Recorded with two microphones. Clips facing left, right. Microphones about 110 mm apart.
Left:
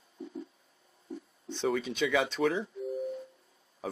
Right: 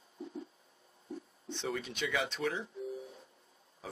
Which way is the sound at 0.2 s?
Centre (ahead or behind).